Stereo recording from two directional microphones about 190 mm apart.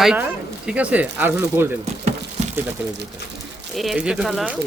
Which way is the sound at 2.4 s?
35° right (ahead or behind).